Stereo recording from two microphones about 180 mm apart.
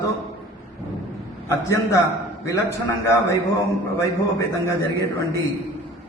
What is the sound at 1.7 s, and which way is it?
A man's voice, 15° left (ahead or behind).